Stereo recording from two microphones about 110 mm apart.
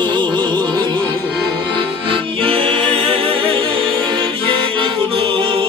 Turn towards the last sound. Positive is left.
turn(degrees=-55)  # may be behind; listen again after turning